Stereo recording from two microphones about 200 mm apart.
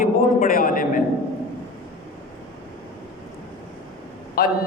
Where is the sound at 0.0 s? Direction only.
45° left (ahead or behind).